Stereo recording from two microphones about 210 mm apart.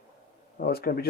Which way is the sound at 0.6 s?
45° left (ahead or behind).